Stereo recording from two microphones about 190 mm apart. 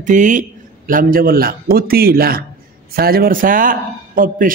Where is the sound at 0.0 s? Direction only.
40° right (ahead or behind).